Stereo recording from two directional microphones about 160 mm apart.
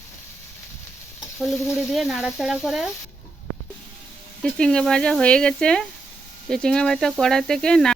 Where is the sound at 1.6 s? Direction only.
15° left (ahead or behind).